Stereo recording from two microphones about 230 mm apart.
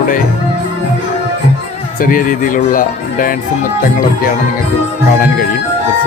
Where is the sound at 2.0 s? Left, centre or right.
Left.